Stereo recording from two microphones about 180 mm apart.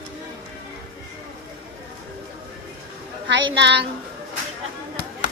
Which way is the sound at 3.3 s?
75° right (ahead or behind).